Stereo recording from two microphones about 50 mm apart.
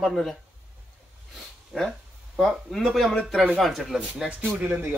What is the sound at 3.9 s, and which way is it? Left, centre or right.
Speech, centre.